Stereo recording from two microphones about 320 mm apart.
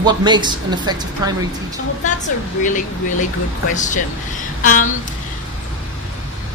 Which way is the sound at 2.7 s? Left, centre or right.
Left.